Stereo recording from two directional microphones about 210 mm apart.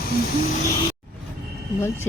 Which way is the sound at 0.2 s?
45° left (ahead or behind).